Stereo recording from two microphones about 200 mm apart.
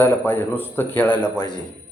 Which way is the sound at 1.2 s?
20° left (ahead or behind).